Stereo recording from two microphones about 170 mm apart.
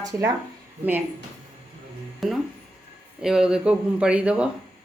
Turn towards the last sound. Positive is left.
turn(degrees=-5)  # may be behind; listen again after turning